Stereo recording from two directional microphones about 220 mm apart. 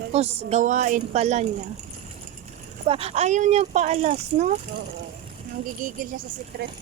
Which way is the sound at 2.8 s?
25° right (ahead or behind).